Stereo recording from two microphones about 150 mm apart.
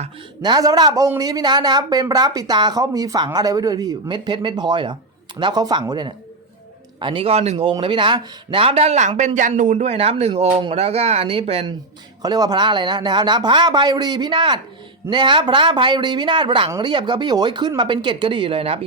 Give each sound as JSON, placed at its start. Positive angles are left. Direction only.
{"t": 0.4, "sound": "speech", "side_deg": -25}
{"t": 12.2, "sound": "speech", "side_deg": -25}